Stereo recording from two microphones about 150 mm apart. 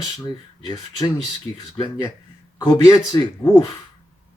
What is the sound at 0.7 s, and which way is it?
Speech, 25° left (ahead or behind).